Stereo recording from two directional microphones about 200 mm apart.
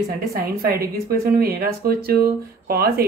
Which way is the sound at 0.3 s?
50° right (ahead or behind).